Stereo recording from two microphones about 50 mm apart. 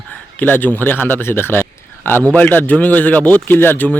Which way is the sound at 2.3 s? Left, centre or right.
Left.